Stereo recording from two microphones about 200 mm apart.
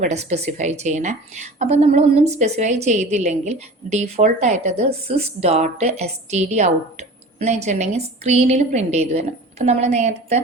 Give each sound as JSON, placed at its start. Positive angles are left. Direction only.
{"t": 0.0, "sound": "a woman's voice", "side_deg": -35}